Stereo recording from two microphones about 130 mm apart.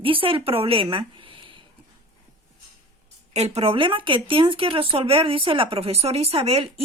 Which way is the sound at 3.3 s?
55° right (ahead or behind).